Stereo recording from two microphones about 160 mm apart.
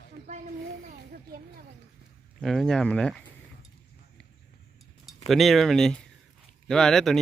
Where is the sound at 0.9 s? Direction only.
65° right (ahead or behind).